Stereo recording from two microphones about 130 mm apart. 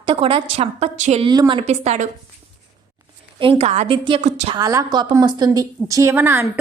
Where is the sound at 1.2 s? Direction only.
35° right (ahead or behind).